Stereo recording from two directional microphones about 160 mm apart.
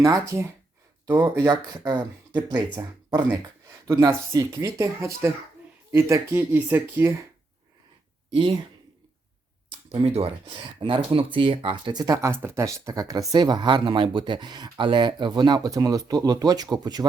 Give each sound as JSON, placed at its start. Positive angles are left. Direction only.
{"t": 0.0, "sound": "speech", "side_deg": -20}
{"t": 3.8, "sound": "speech", "side_deg": -20}
{"t": 8.4, "sound": "speech", "side_deg": -30}
{"t": 9.6, "sound": "speech", "side_deg": -35}